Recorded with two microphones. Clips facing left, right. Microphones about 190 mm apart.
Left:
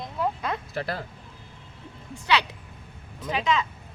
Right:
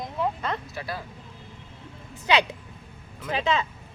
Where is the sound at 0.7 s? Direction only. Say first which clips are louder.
Left 4 dB; 60° left (ahead or behind).